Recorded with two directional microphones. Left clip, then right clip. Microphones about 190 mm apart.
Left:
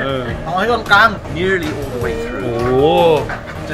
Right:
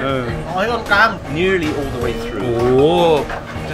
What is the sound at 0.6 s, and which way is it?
Speech, 50° left (ahead or behind).